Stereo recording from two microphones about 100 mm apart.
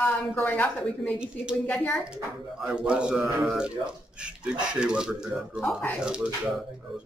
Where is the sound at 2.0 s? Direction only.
10° right (ahead or behind).